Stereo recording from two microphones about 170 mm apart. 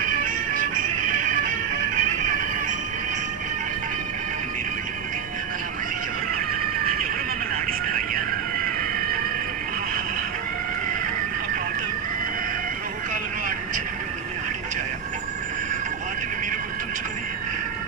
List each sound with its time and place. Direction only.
0.0 s music: 50° right (ahead or behind)